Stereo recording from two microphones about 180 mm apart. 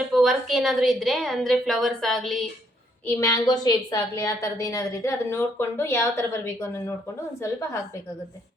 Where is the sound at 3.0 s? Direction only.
15° left (ahead or behind).